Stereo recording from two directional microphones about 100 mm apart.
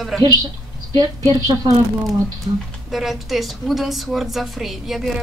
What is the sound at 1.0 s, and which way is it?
Speech, 40° right (ahead or behind).